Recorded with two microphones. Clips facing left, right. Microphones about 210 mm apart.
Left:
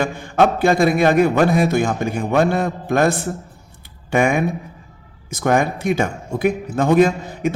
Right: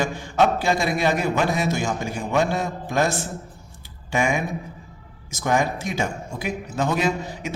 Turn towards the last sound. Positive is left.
turn(degrees=55)  # may be behind; listen again after turning